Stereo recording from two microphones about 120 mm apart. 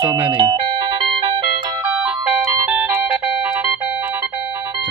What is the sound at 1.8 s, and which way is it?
Music, 10° right (ahead or behind).